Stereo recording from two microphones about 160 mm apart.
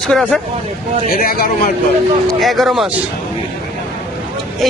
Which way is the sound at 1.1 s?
65° left (ahead or behind).